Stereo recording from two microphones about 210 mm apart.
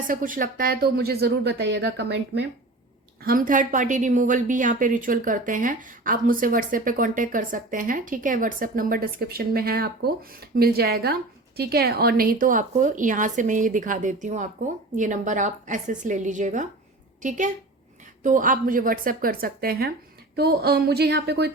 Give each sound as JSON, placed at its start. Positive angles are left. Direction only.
{"t": 0.1, "sound": "speech", "side_deg": -40}
{"t": 3.2, "sound": "a woman's voice", "side_deg": -40}